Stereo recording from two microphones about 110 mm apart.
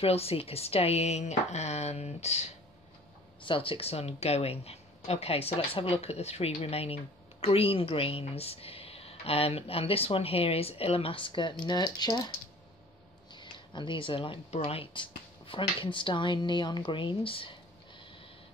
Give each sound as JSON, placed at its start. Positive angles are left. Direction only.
{"t": 0.0, "sound": "speech", "side_deg": 65}
{"t": 3.4, "sound": "speech", "side_deg": 55}
{"t": 13.3, "sound": "a sound", "side_deg": 45}
{"t": 14.5, "sound": "speech", "side_deg": 70}